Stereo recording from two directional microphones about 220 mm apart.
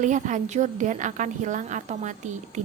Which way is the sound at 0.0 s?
35° right (ahead or behind).